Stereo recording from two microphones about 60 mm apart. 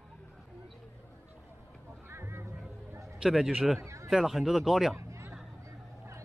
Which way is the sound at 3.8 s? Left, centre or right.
Right.